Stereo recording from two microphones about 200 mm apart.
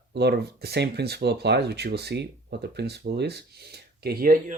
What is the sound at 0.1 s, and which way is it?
Speech, 55° right (ahead or behind).